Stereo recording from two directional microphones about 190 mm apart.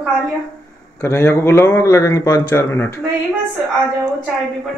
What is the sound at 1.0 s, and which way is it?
A man's voice, 15° left (ahead or behind).